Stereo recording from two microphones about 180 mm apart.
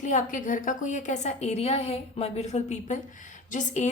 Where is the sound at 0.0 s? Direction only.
45° left (ahead or behind).